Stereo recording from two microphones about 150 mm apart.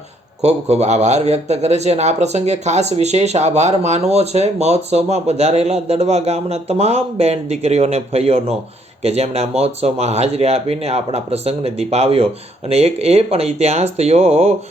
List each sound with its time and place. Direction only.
0.4 s speech: 45° right (ahead or behind)